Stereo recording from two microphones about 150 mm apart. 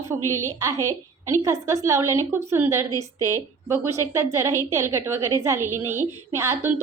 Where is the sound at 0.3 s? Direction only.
20° right (ahead or behind).